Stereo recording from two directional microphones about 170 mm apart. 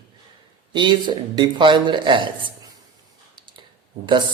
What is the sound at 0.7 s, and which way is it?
A man's voice, 25° right (ahead or behind).